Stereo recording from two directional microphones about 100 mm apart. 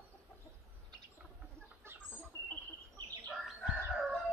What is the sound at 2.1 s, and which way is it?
Bird, 15° left (ahead or behind).